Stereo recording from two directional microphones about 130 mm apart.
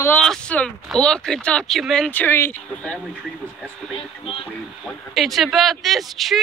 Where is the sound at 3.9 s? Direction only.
45° left (ahead or behind).